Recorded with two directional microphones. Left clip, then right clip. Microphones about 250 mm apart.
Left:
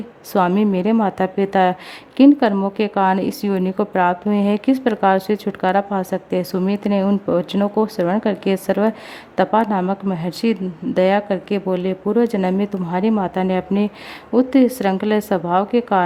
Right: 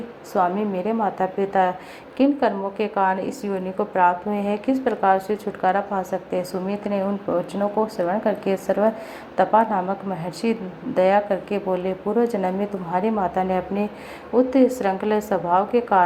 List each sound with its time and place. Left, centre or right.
0.3 s speech: left